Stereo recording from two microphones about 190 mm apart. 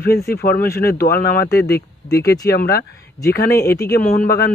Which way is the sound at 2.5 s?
55° left (ahead or behind).